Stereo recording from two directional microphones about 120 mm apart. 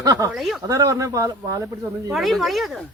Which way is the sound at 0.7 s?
30° right (ahead or behind).